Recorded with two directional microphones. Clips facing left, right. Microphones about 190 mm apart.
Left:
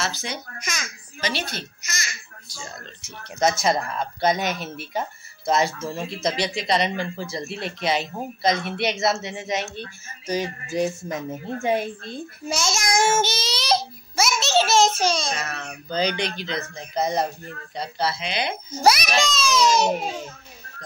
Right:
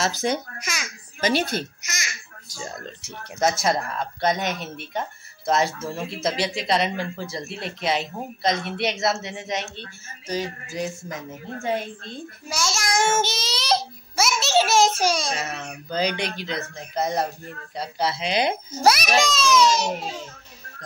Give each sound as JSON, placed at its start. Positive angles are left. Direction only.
{"t": 0.0, "sound": "a woman's voice", "side_deg": -45}
{"t": 0.6, "sound": "speech", "side_deg": -5}
{"t": 1.2, "sound": "a woman's voice", "side_deg": -50}
{"t": 1.8, "sound": "babbling", "side_deg": -20}
{"t": 2.5, "sound": "a man's voice", "side_deg": -35}
{"t": 3.3, "sound": "speech", "side_deg": 0}
{"t": 10.2, "sound": "a child's voice", "side_deg": 20}
{"t": 13.1, "sound": "speech", "side_deg": 0}
{"t": 15.3, "sound": "a child's voice", "side_deg": -20}
{"t": 15.9, "sound": "speech", "side_deg": -5}
{"t": 17.7, "sound": "a woman's voice", "side_deg": -10}
{"t": 18.2, "sound": "a man's voice", "side_deg": -35}
{"t": 18.7, "sound": "a woman's voice", "side_deg": 0}
{"t": 19.7, "sound": "a child's voice", "side_deg": 50}